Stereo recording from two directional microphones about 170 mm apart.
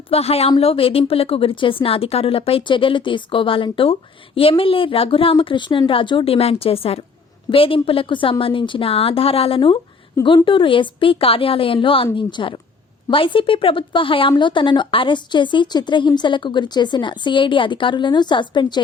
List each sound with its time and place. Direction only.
0.1 s a woman's voice: 35° left (ahead or behind)